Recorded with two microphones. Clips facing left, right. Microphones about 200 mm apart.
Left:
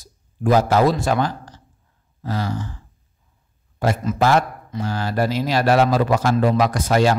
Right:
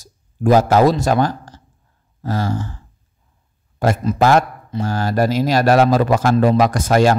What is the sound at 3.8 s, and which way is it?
A man's voice, 45° right (ahead or behind).